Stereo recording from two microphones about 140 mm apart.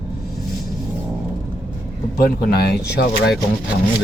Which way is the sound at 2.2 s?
90° left.